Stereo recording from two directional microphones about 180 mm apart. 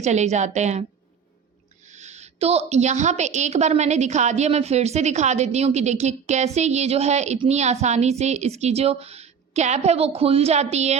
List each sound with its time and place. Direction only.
0.0 s a woman's voice: 40° right (ahead or behind)
1.9 s a woman's voice: 40° right (ahead or behind)